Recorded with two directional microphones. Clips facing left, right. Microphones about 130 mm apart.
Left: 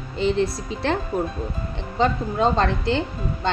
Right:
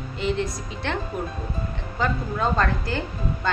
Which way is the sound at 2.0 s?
25° left (ahead or behind).